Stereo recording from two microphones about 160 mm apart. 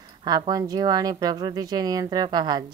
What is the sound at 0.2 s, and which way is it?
Speech, 25° right (ahead or behind).